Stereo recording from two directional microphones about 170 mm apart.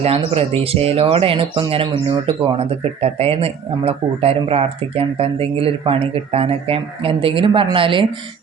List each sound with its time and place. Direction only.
0.2 s speech: 35° right (ahead or behind)